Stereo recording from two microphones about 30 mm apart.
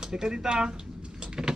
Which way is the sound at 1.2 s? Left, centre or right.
Right.